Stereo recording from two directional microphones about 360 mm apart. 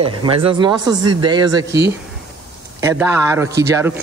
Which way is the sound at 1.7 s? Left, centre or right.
Right.